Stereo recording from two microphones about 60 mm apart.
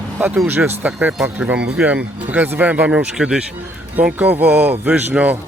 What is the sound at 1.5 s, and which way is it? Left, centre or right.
Speech, centre.